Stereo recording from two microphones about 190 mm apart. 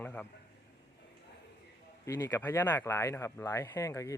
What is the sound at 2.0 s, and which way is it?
Speech, 15° left (ahead or behind).